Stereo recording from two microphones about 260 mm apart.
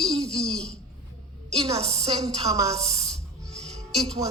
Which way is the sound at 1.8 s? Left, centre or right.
Right.